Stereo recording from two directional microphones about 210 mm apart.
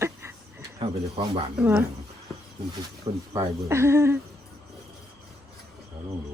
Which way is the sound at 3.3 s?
10° right (ahead or behind).